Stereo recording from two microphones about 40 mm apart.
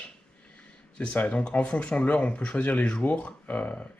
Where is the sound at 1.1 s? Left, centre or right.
Left.